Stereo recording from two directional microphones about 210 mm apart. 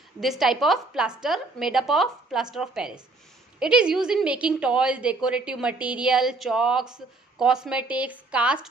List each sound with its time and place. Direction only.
0.2 s a woman's voice: centre (ahead or behind)